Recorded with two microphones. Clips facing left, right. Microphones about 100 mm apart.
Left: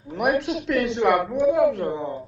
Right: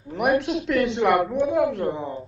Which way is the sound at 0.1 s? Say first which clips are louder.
Right 1 dB; centre (ahead or behind).